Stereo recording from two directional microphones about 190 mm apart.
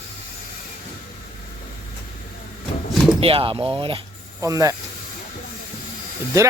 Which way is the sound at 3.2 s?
30° right (ahead or behind).